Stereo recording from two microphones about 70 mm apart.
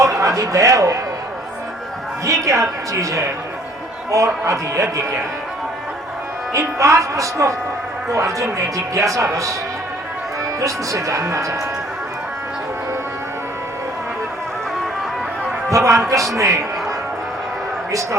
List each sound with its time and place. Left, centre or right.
0.0 s speech: right
2.2 s a woman's voice: right
4.4 s a woman's voice: right
6.5 s a woman's voice: right
8.5 s a woman's voice: right
10.6 s a woman's voice: right
15.7 s a woman's voice: right